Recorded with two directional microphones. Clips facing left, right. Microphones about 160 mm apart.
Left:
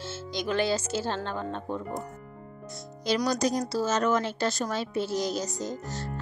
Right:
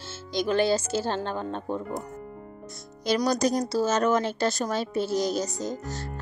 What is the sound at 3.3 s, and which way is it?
A woman's voice, 45° right (ahead or behind).